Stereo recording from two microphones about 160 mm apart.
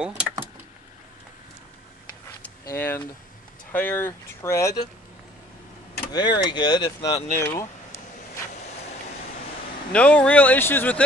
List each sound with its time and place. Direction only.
0.0 s vehicle: 5° right (ahead or behind)
2.6 s speech: 15° left (ahead or behind)
6.1 s speech: 30° left (ahead or behind)
9.9 s speech: 5° left (ahead or behind)